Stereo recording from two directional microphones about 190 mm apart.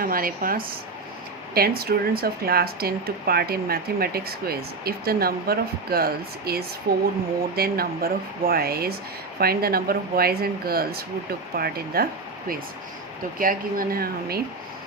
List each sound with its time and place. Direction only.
0.0 s speech: 50° right (ahead or behind)
13.4 s speech: 50° right (ahead or behind)